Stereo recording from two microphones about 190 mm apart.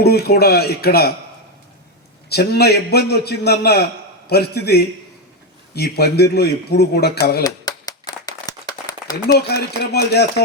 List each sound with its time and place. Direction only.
0.0 s speech: 55° left (ahead or behind)
2.3 s speech: 60° left (ahead or behind)
7.4 s clapping: 20° left (ahead or behind)
9.5 s speech: 60° left (ahead or behind)